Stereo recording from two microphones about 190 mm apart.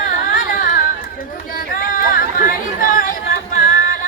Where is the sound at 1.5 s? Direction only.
45° left (ahead or behind).